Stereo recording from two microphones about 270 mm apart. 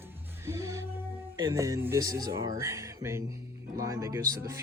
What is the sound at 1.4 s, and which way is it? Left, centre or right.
Speech, centre.